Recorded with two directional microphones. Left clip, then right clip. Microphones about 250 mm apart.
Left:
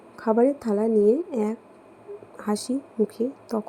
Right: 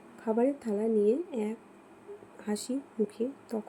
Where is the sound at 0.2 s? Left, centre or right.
Centre.